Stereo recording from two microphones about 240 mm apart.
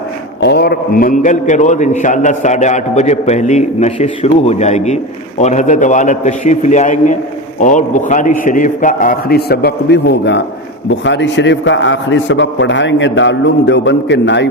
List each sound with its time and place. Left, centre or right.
0.4 s a man's voice: left